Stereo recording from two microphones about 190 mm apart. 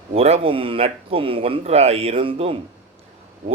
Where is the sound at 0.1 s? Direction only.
30° right (ahead or behind).